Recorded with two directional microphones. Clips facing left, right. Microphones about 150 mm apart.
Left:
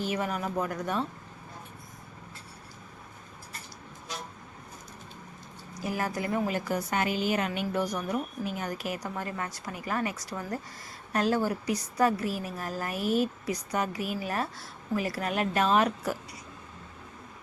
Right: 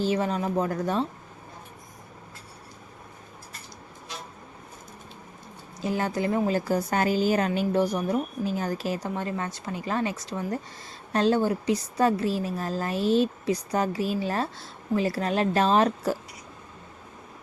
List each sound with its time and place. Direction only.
0.0 s a woman's voice: 30° right (ahead or behind)
5.8 s a woman's voice: 25° right (ahead or behind)